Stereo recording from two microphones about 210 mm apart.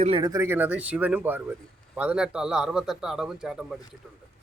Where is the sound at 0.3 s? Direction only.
10° right (ahead or behind).